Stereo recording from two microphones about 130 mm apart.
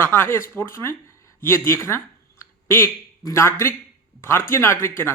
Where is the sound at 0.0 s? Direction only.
15° left (ahead or behind).